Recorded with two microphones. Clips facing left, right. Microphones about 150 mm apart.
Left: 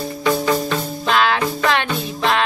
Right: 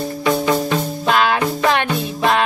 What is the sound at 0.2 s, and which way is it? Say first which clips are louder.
Music: right 1 dB; 15° right (ahead or behind).